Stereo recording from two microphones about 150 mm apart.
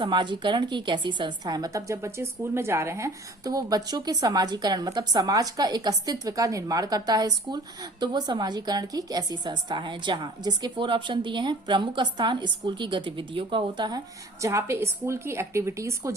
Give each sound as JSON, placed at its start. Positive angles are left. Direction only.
{"t": 0.0, "sound": "a woman's voice", "side_deg": -30}
{"t": 14.4, "sound": "a woman's voice", "side_deg": -20}